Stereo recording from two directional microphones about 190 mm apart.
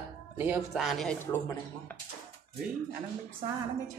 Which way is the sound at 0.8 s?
Centre (ahead or behind).